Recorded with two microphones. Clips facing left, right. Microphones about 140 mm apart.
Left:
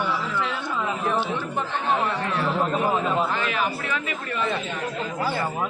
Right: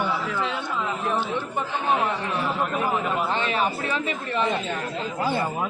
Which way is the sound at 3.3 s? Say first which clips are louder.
Right 1 dB; 30° right (ahead or behind).